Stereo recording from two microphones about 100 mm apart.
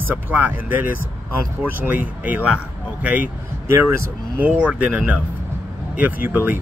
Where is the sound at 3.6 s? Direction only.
30° right (ahead or behind).